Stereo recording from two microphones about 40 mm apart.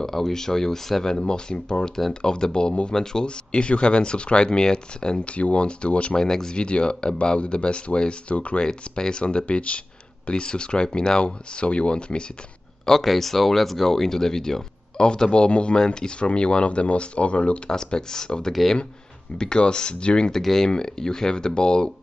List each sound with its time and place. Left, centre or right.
0.0 s speech: centre
1.1 s speech: left
6.1 s speech: centre; by 8.6 s left
8.6 s speech: centre
12.8 s speech: centre; by 17.6 s left
17.6 s speech: centre
18.5 s speech: centre
19.3 s speech: left
20.2 s speech: centre